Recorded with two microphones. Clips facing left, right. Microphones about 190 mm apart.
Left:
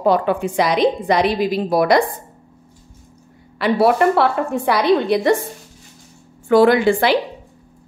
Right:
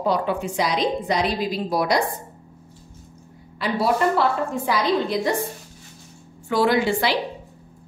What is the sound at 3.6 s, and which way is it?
A woman's voice, 65° left (ahead or behind).